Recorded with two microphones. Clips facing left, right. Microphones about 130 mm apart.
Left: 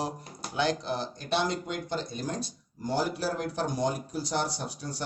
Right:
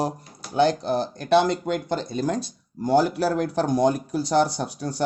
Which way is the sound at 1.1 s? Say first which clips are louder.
Right 11 dB; 65° right (ahead or behind).